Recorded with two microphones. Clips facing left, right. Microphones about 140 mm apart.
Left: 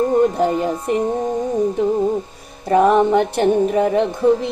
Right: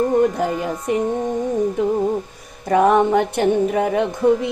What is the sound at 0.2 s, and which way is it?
Speech, 30° left (ahead or behind).